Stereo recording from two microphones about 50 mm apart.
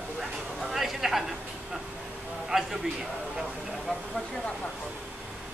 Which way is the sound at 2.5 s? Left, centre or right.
Centre.